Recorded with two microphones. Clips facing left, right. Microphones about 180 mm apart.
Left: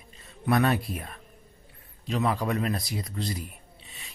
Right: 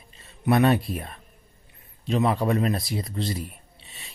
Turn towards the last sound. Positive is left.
turn(degrees=-30)  # may be behind; listen again after turning